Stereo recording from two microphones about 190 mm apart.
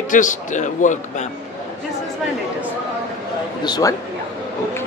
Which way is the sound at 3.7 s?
20° left (ahead or behind).